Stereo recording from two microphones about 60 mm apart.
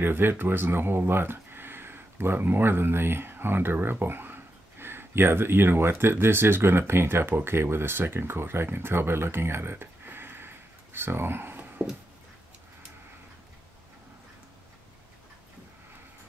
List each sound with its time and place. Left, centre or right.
0.0 s speech: right